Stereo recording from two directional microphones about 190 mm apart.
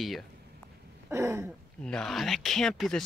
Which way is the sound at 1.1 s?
15° right (ahead or behind).